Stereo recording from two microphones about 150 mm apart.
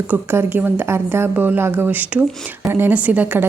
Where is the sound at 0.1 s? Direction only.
15° right (ahead or behind).